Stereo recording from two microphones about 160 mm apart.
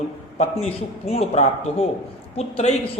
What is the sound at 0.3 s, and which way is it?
A man's voice, 40° left (ahead or behind).